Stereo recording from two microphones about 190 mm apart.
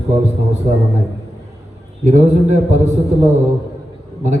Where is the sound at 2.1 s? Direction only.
35° right (ahead or behind).